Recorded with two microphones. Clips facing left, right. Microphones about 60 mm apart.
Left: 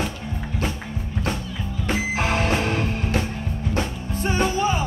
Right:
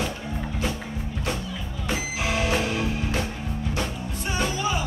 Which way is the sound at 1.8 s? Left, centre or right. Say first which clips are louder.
Left 4 dB; left.